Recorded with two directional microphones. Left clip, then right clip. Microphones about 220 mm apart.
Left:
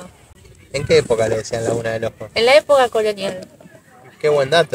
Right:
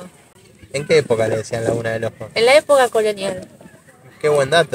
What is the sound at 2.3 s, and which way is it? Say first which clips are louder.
Speech: even; 5° right (ahead or behind).